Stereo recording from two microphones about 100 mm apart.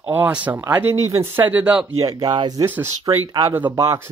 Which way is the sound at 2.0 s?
40° right (ahead or behind).